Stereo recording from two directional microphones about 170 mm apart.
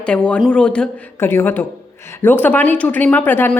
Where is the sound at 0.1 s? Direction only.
5° left (ahead or behind).